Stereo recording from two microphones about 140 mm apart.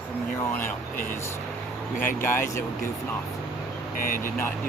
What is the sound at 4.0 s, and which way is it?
Speech, 90° left.